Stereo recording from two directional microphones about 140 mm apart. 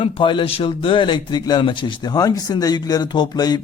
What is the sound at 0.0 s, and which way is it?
A man's voice, 40° left (ahead or behind).